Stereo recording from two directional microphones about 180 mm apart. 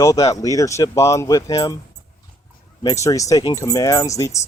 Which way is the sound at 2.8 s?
20° left (ahead or behind).